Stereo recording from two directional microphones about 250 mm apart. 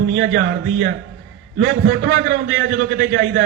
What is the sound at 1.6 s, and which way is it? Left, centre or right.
A man's voice, right.